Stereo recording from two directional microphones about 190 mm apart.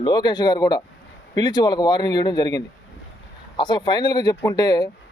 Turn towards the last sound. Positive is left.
turn(degrees=20)  # may be behind; listen again after turning